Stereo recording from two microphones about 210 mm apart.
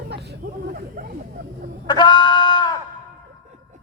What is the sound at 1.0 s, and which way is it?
Speech, 45° right (ahead or behind).